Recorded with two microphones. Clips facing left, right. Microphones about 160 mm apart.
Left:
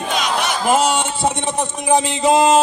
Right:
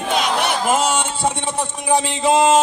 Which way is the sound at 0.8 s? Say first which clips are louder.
Left 2 dB; 15° left (ahead or behind).